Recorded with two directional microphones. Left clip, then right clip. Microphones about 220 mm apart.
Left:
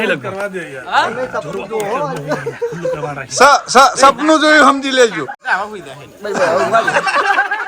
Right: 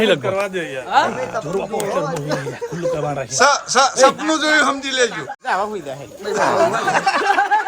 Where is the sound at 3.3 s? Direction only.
Centre (ahead or behind).